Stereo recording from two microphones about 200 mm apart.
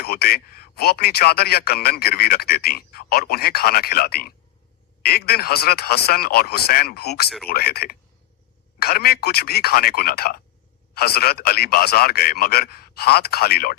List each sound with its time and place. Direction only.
0.0 s a man's voice: 50° left (ahead or behind)